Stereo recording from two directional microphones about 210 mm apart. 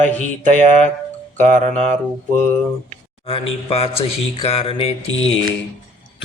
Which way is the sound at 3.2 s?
30° left (ahead or behind).